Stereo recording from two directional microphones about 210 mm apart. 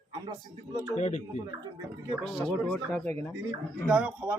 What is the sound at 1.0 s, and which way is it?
Speech, 35° left (ahead or behind).